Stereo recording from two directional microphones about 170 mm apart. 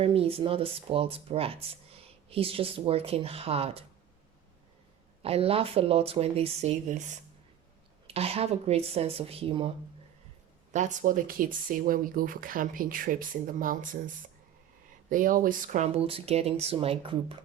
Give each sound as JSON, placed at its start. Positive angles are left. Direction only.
{"t": 0.0, "sound": "speech", "side_deg": -35}
{"t": 5.2, "sound": "speech", "side_deg": -35}
{"t": 8.0, "sound": "speech", "side_deg": -35}
{"t": 10.7, "sound": "speech", "side_deg": -45}
{"t": 15.1, "sound": "speech", "side_deg": -50}